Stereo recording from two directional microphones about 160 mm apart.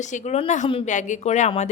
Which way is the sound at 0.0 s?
50° left (ahead or behind).